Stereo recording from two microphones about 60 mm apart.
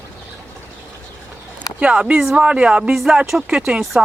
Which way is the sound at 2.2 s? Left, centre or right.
Centre.